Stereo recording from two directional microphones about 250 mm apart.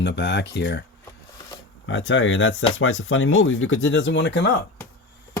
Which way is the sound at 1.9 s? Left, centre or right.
Left.